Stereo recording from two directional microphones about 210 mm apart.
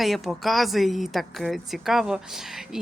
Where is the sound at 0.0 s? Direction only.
Centre (ahead or behind).